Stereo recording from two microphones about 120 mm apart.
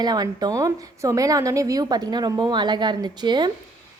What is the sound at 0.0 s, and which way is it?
A woman's voice, 35° right (ahead or behind).